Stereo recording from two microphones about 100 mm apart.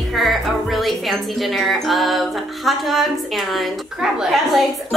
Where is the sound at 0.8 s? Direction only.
Centre (ahead or behind).